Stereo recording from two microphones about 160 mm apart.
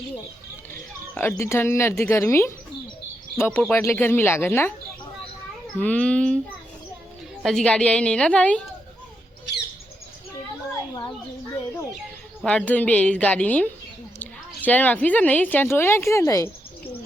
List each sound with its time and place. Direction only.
1.1 s speech: 10° left (ahead or behind)
5.7 s speech: 10° left (ahead or behind)
7.4 s speech: 5° left (ahead or behind)
12.5 s speech: 10° left (ahead or behind)